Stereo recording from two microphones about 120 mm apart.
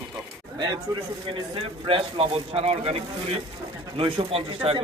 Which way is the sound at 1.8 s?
50° right (ahead or behind).